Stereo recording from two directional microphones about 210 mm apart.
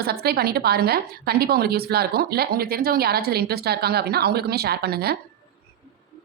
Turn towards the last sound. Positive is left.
turn(degrees=-50)  # may be behind; listen again after turning